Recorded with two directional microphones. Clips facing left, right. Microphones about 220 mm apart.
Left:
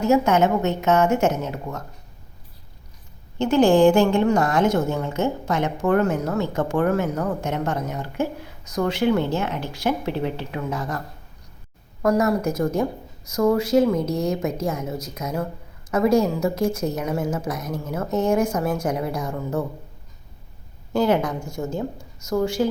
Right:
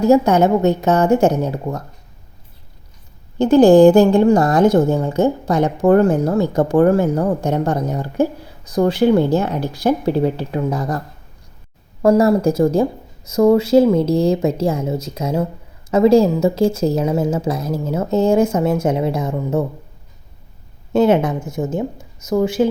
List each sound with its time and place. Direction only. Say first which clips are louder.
0.0 s a woman's voice: right 5 dB; 35° right (ahead or behind)
3.3 s a woman's voice: right 7 dB; 35° right (ahead or behind)
12.0 s speech: right 7 dB; 30° right (ahead or behind)
20.9 s speech: right 6 dB; 25° right (ahead or behind)